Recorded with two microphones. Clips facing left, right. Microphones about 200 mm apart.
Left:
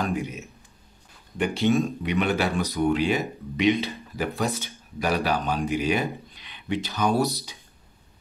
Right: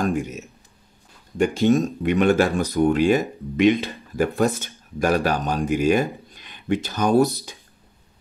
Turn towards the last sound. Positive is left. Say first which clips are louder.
# right 6 dB
turn(degrees=-50)  # may be behind; listen again after turning